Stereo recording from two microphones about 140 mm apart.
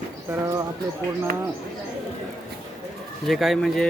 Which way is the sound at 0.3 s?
20° right (ahead or behind).